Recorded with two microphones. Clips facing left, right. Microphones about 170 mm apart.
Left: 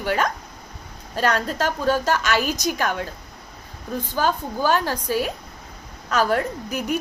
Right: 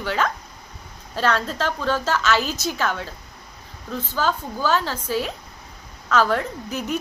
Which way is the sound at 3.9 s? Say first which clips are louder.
Left 1 dB; 15° left (ahead or behind).